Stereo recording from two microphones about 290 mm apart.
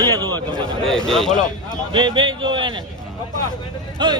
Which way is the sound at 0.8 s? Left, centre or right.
Centre.